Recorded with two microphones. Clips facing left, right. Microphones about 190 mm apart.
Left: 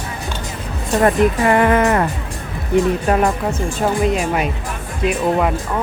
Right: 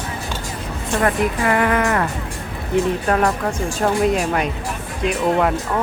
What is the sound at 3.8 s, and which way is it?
Speech, centre (ahead or behind).